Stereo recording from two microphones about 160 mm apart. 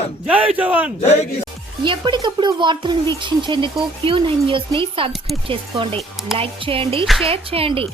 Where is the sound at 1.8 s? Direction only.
30° right (ahead or behind).